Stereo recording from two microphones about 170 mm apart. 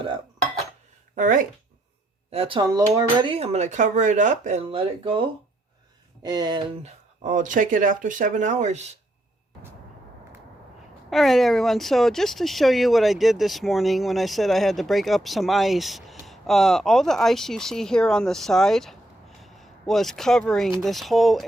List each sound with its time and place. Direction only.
1.1 s speech: 50° right (ahead or behind)
2.3 s speech: 35° right (ahead or behind)
2.6 s dishes: 20° right (ahead or behind)
3.2 s speech: 35° right (ahead or behind)
6.2 s dishes: 25° right (ahead or behind)
6.8 s speech: 45° right (ahead or behind)
11.1 s speech: centre (ahead or behind)